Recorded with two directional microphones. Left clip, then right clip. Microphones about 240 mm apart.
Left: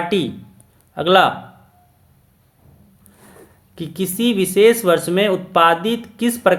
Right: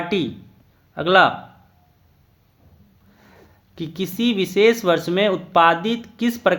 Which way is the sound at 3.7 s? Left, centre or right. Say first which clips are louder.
Left 3 dB; centre.